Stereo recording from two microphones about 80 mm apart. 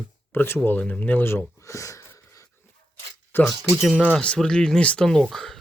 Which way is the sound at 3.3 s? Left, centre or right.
Left.